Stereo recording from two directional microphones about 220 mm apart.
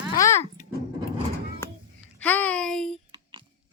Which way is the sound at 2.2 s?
5° left (ahead or behind).